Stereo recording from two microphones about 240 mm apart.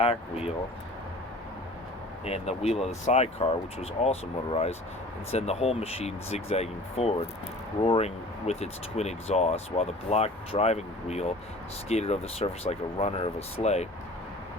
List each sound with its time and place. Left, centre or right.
0.0 s speech: left
2.2 s speech: left